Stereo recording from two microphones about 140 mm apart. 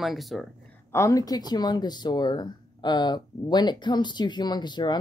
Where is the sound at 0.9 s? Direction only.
25° left (ahead or behind).